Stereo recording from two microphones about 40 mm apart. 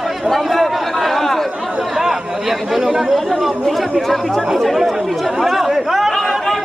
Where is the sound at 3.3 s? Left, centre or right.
Centre.